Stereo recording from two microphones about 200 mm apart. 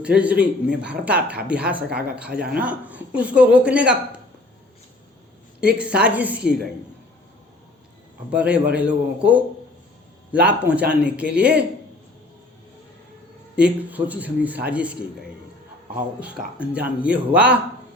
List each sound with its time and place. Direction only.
0.0 s a woman's voice: 5° right (ahead or behind)
5.5 s a woman's voice: 5° right (ahead or behind)
8.3 s speech: 5° right (ahead or behind)
10.4 s speech: 5° right (ahead or behind)
13.6 s speech: 5° right (ahead or behind)
16.6 s speech: 5° right (ahead or behind)